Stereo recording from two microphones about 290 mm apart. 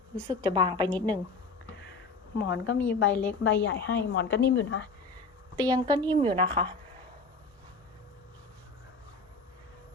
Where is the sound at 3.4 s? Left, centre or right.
Left.